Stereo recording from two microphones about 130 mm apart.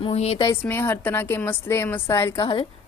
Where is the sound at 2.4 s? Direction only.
40° left (ahead or behind).